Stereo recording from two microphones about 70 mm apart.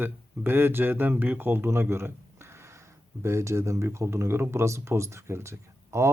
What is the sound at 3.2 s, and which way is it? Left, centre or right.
Speech, right.